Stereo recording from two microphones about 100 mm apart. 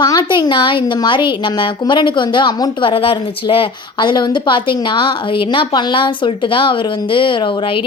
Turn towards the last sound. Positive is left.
turn(degrees=60)  # may be behind; listen again after turning